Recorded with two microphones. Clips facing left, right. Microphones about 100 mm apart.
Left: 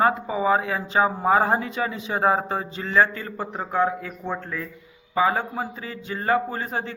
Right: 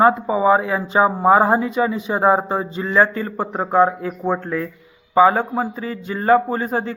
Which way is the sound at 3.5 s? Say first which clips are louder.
Right 7 dB; 45° right (ahead or behind).